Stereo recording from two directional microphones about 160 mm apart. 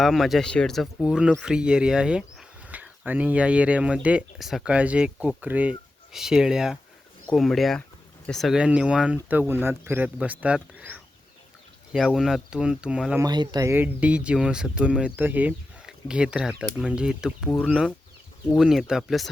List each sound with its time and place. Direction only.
0.0 s speech: centre (ahead or behind)
13.2 s speech: 25° right (ahead or behind); by 19.3 s centre (ahead or behind)